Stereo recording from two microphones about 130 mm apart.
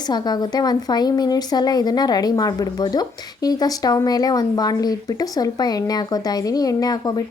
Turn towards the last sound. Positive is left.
turn(degrees=30)  # may be behind; listen again after turning